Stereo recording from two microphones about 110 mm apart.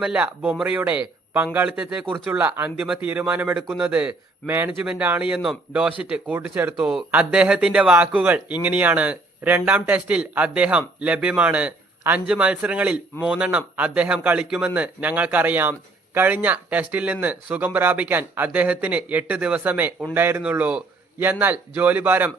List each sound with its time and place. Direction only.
0.0 s speech: 10° right (ahead or behind)